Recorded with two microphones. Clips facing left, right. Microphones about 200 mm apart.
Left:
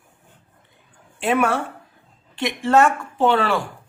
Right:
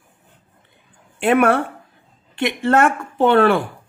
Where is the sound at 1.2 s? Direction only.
60° right (ahead or behind).